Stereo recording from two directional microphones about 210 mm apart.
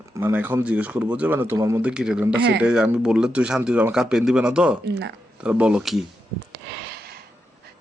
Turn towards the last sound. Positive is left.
turn(degrees=0)  # may be behind; listen again after turning